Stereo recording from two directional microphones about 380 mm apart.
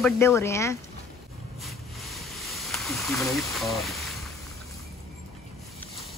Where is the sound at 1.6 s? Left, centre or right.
Centre.